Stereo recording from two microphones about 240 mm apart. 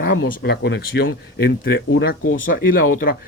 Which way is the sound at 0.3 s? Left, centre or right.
Left.